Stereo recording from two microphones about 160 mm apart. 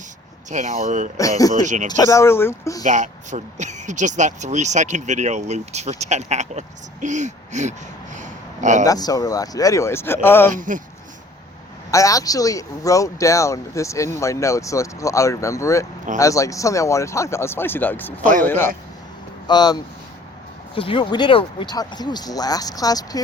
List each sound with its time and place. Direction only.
0.5 s speech: 50° right (ahead or behind)
1.1 s speech: 20° left (ahead or behind)
1.6 s speech: 50° right (ahead or behind)
1.9 s speech: 20° left (ahead or behind)
2.8 s speech: 50° right (ahead or behind)
8.8 s speech: 25° left (ahead or behind)
10.5 s speech: 55° right (ahead or behind)
11.9 s a man's voice: 20° left (ahead or behind)
19.5 s speech: 25° left (ahead or behind)